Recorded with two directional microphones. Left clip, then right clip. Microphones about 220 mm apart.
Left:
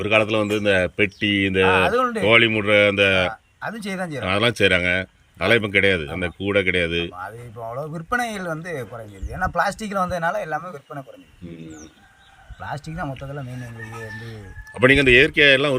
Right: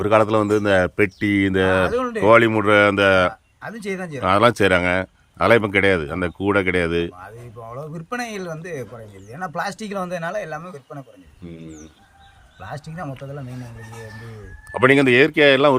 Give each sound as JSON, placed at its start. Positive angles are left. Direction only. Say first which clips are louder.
{"t": 0.0, "sound": "speech", "louder": "right 2 dB", "side_deg": -25}
{"t": 1.9, "sound": "speech", "louder": "left 3 dB", "side_deg": -10}
{"t": 2.2, "sound": "speech", "louder": "right 4 dB", "side_deg": -20}
{"t": 9.6, "sound": "speech", "louder": "left 3 dB", "side_deg": -20}
{"t": 10.6, "sound": "speech", "louder": "left 2 dB", "side_deg": -10}
{"t": 13.0, "sound": "speech", "louder": "left 2 dB", "side_deg": -15}
{"t": 14.8, "sound": "speech", "louder": "even", "side_deg": -15}